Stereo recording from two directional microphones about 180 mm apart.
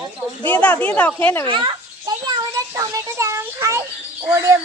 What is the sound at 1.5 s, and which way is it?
Speech, 25° right (ahead or behind).